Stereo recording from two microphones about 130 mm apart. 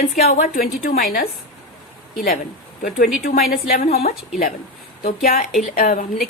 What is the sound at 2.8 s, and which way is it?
A woman's voice, 90° left.